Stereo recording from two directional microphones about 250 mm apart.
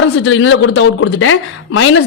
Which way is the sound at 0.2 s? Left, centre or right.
Left.